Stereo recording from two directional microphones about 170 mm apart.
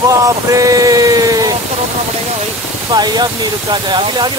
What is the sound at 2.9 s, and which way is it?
Speech, 25° right (ahead or behind).